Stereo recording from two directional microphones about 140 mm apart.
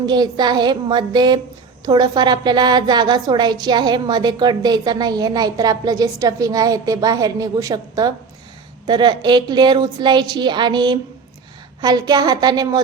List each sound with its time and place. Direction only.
0.0 s a woman's voice: 30° right (ahead or behind)